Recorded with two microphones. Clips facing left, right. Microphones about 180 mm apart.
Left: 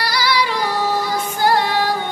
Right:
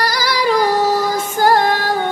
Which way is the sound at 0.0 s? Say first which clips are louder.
Right 2 dB; 45° right (ahead or behind).